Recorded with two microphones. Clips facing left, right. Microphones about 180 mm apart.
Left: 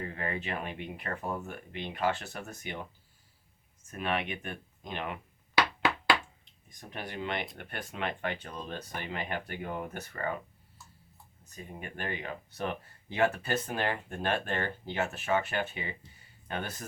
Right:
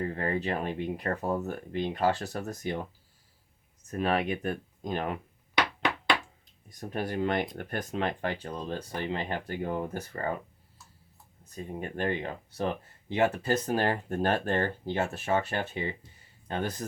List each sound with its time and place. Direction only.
0.0 s speech: 35° right (ahead or behind)
3.8 s speech: 40° right (ahead or behind)
6.4 s speech: 40° right (ahead or behind)
11.5 s speech: 35° right (ahead or behind)
13.4 s speech: 40° right (ahead or behind)